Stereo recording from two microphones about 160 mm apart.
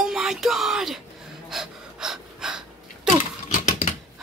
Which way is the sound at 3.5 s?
50° left (ahead or behind).